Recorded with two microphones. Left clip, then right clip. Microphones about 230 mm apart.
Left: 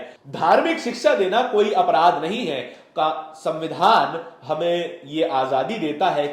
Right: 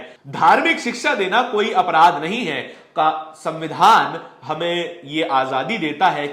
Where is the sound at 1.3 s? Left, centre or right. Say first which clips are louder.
Right 1 dB; right.